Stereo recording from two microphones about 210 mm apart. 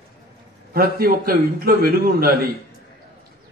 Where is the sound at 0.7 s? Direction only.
45° right (ahead or behind).